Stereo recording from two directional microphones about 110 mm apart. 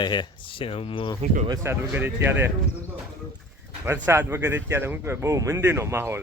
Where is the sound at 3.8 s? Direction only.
20° right (ahead or behind).